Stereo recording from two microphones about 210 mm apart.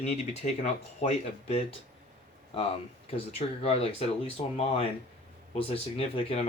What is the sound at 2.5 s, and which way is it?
Speech, 25° left (ahead or behind).